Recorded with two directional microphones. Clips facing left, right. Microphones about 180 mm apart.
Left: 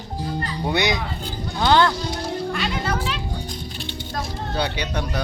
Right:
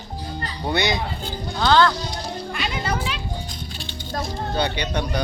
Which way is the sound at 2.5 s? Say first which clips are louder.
Left 1 dB; 10° right (ahead or behind).